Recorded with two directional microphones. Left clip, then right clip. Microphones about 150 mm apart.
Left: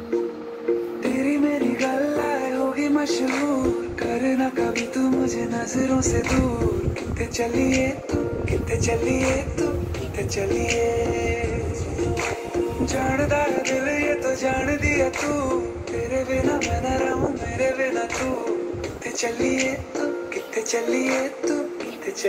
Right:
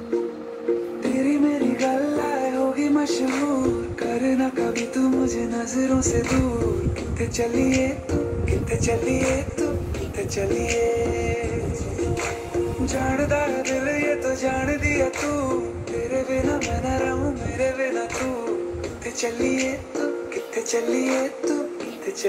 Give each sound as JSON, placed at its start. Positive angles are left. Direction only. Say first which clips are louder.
{"t": 1.0, "sound": "music", "louder": "right 1 dB", "side_deg": -50}
{"t": 10.3, "sound": "speech", "louder": "even", "side_deg": -40}
{"t": 12.0, "sound": "music", "louder": "left 1 dB", "side_deg": -40}